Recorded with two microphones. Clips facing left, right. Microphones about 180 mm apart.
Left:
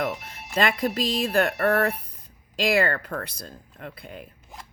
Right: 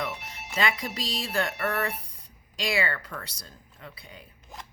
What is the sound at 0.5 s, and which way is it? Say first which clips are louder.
Speech: left 6 dB; 55° left (ahead or behind).